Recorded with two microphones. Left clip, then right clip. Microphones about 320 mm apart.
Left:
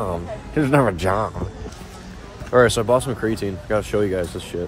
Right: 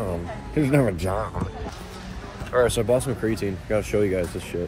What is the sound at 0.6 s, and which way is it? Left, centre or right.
Speech, centre.